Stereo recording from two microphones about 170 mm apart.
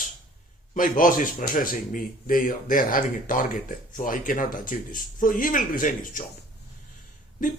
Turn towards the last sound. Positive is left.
turn(degrees=50)  # may be behind; listen again after turning